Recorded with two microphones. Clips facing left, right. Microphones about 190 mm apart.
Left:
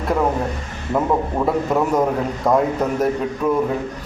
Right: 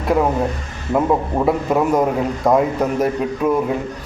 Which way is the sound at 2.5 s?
20° right (ahead or behind).